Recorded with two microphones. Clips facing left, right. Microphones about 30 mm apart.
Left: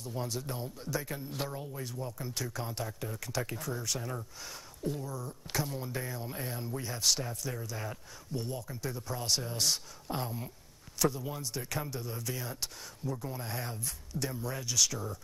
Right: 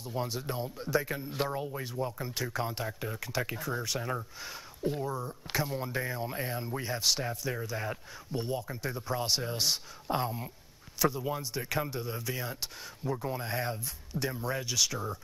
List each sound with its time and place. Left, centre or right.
0.0 s speech: right